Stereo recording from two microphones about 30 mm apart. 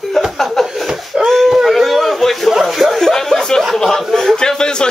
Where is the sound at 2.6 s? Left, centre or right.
Centre.